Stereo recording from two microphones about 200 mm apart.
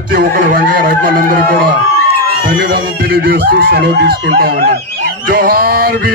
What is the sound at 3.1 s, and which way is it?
A man's voice, 50° right (ahead or behind).